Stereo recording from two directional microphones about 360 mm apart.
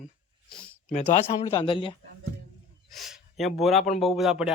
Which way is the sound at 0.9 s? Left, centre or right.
Centre.